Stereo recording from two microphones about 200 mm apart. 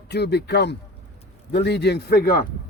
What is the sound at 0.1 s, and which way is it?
Speech, 55° left (ahead or behind).